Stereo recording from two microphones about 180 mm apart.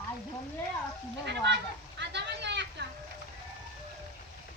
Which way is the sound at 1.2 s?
70° right (ahead or behind).